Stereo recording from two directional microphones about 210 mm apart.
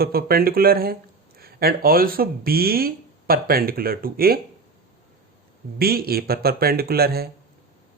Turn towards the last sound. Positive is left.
turn(degrees=-50)  # may be behind; listen again after turning